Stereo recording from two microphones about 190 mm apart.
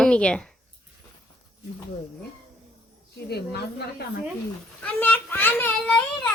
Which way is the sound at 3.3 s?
60° left (ahead or behind).